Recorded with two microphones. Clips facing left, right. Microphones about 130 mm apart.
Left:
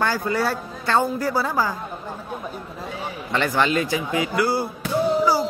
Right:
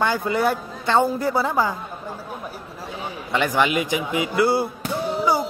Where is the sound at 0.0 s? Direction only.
20° right (ahead or behind).